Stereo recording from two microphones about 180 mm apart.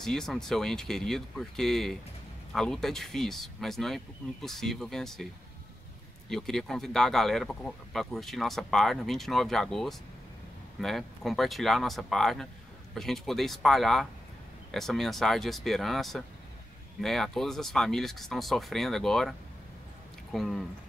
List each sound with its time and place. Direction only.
0.0 s speech: 5° left (ahead or behind)
20.3 s speech: centre (ahead or behind)